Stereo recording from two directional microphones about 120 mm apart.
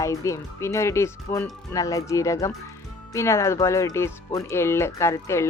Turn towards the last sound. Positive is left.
turn(degrees=20)  # may be behind; listen again after turning